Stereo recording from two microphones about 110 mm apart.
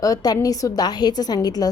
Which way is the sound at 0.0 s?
35° left (ahead or behind).